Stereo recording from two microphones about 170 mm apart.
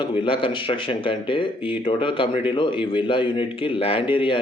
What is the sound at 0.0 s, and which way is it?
Speech, 30° left (ahead or behind).